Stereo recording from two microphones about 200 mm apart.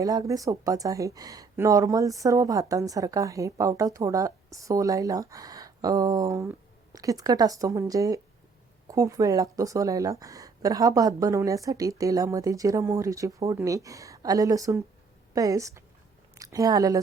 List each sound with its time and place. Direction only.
0.0 s speech: 15° right (ahead or behind)